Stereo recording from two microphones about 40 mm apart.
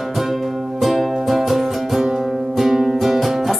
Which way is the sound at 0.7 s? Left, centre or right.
Centre.